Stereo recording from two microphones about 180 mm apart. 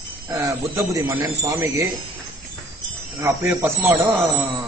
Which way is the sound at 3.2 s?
15° right (ahead or behind).